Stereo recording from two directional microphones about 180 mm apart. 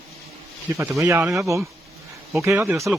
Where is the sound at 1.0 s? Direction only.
15° right (ahead or behind).